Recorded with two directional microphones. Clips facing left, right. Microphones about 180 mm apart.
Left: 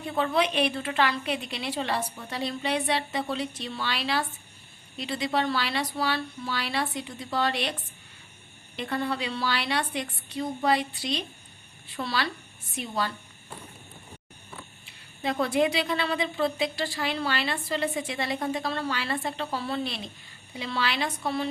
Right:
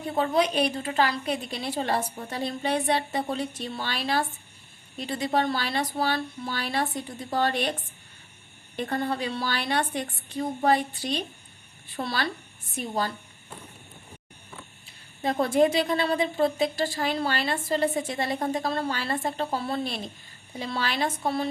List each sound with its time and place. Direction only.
0.0 s a woman's voice: 40° right (ahead or behind)
15.2 s a woman's voice: 45° right (ahead or behind)